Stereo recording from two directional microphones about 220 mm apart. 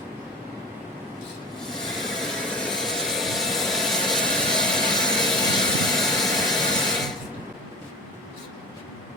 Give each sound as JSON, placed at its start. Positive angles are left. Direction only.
{"t": 1.7, "sound": "vehicle", "side_deg": 0}